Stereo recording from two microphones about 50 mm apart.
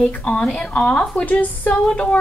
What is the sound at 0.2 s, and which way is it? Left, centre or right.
Speech, centre.